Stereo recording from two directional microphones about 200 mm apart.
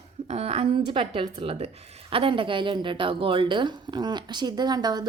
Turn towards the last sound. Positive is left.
turn(degrees=-20)  # may be behind; listen again after turning